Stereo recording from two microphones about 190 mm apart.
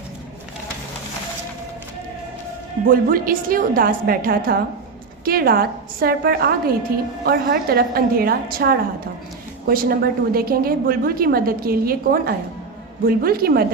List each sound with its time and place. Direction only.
2.8 s a woman's voice: 50° right (ahead or behind)